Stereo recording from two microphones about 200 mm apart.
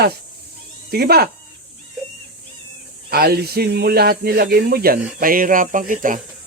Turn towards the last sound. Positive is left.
turn(degrees=-40)  # may be behind; listen again after turning